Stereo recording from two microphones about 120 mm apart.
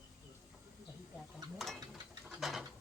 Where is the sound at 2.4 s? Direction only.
Centre (ahead or behind).